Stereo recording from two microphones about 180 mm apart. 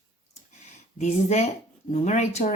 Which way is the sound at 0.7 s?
40° left (ahead or behind).